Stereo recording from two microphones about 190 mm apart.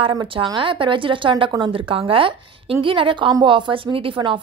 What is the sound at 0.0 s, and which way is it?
A woman's voice, 25° right (ahead or behind).